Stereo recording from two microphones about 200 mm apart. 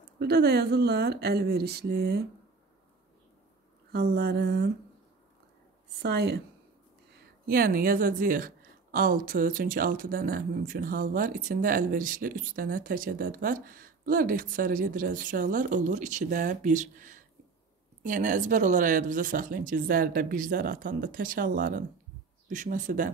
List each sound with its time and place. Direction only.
0.2 s a woman's voice: 50° right (ahead or behind)
3.9 s a woman's voice: 55° right (ahead or behind)
5.9 s a woman's voice: 55° right (ahead or behind)
7.4 s a woman's voice: 45° right (ahead or behind)